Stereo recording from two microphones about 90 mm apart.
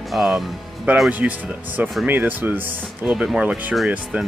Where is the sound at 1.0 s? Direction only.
15° right (ahead or behind).